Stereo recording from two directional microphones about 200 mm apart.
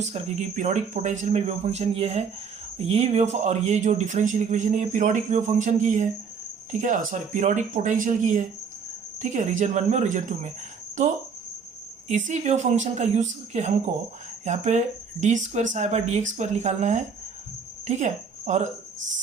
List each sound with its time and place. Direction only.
0.0 s speech: 35° right (ahead or behind)
12.0 s speech: 35° right (ahead or behind)